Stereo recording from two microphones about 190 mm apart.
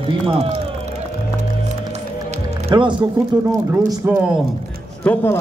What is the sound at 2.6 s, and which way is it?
Speech, 25° right (ahead or behind).